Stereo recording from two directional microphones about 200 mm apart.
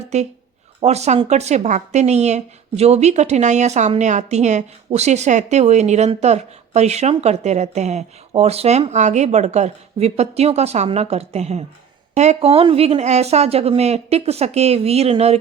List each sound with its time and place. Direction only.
0.1 s a woman's voice: 35° right (ahead or behind)